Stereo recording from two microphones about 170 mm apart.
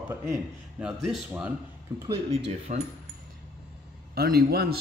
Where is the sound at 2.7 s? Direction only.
45° right (ahead or behind).